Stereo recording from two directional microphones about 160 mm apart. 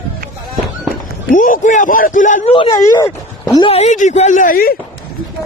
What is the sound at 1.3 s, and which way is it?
A man's voice, 55° left (ahead or behind).